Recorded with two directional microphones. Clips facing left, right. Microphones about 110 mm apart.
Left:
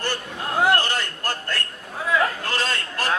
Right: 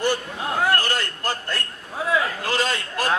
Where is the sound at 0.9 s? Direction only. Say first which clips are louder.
Right 1 dB; 15° right (ahead or behind).